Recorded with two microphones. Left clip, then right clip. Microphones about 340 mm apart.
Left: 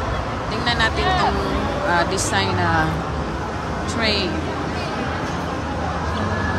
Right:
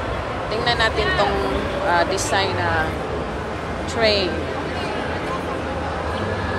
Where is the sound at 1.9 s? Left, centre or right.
Centre.